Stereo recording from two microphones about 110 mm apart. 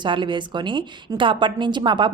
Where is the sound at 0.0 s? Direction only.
45° right (ahead or behind).